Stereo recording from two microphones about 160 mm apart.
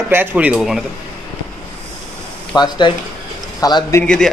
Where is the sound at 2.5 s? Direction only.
25° left (ahead or behind).